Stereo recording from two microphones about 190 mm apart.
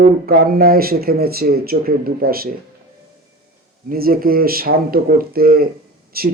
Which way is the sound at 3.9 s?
50° right (ahead or behind).